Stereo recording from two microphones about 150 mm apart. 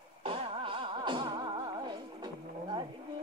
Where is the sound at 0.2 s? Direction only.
40° right (ahead or behind).